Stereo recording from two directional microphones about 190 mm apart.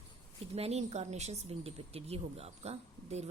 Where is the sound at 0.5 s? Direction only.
35° right (ahead or behind).